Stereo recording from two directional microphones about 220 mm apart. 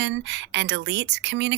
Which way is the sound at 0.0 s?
55° right (ahead or behind).